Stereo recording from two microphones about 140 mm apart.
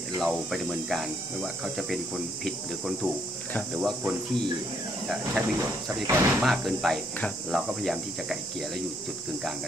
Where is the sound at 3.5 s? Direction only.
10° left (ahead or behind).